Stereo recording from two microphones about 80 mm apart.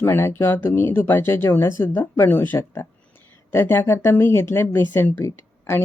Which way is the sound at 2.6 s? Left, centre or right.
Left.